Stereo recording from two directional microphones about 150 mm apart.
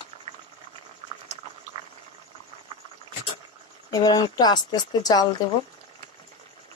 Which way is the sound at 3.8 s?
25° left (ahead or behind).